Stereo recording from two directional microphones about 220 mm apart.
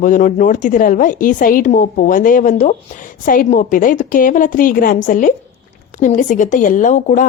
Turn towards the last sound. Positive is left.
turn(degrees=35)  # may be behind; listen again after turning